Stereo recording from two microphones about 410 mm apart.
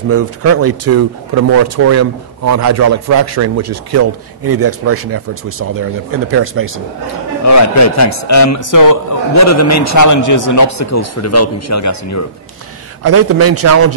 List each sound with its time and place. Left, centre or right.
0.1 s speech: right
7.4 s a man's voice: left
13.0 s speech: right